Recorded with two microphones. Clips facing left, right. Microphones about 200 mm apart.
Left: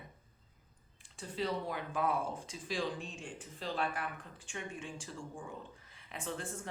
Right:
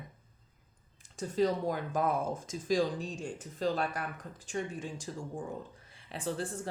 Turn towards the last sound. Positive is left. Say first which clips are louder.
# right 6 dB
turn(degrees=-35)  # may be behind; listen again after turning